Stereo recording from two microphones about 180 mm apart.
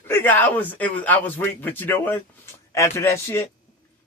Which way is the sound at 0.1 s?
10° left (ahead or behind).